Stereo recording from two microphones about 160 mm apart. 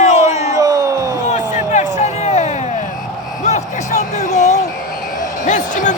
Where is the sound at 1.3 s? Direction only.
50° left (ahead or behind).